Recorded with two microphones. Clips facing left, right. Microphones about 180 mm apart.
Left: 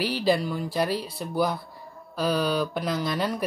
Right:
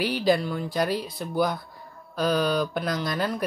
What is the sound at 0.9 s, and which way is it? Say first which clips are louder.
Speech: right 1 dB; 30° left (ahead or behind).